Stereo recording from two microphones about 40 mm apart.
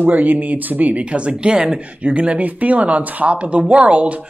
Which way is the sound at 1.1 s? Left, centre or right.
Right.